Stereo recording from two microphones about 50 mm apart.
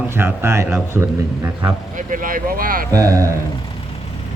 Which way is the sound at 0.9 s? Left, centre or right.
Right.